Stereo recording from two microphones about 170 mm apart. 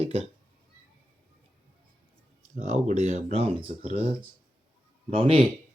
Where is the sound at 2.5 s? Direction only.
45° right (ahead or behind).